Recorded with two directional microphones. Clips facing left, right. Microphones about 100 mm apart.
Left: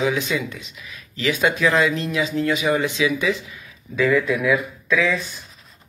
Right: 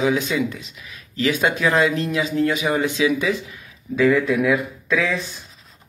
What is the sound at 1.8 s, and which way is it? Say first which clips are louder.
Speech: right 1 dB; 45° right (ahead or behind).